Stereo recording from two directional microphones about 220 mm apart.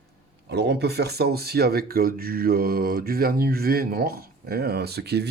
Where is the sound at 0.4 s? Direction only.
50° right (ahead or behind).